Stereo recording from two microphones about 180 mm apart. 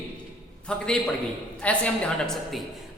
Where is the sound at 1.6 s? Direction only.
5° left (ahead or behind).